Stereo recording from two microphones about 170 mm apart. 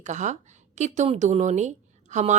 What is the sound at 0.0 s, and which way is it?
A woman's voice, 45° right (ahead or behind).